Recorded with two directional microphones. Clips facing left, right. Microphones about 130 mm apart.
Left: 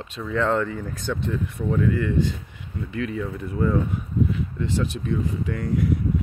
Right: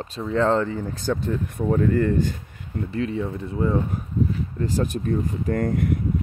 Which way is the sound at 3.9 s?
40° right (ahead or behind).